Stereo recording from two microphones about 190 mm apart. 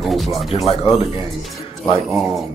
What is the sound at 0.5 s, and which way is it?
Speech, 35° left (ahead or behind).